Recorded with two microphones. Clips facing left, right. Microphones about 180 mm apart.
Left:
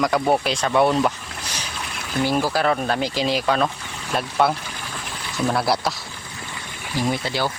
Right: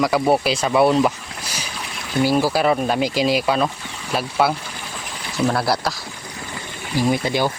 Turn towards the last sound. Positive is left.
turn(degrees=-15)  # may be behind; listen again after turning